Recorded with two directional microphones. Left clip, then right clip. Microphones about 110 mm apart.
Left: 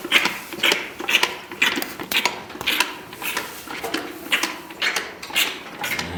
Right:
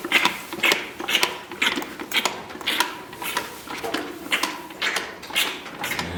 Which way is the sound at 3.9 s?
5° right (ahead or behind).